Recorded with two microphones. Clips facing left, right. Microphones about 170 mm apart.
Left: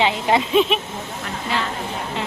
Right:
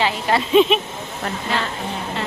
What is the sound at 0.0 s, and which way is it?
Speech, 20° left (ahead or behind).